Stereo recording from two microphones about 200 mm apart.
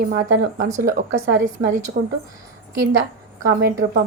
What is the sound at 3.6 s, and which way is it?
Speech, 45° right (ahead or behind).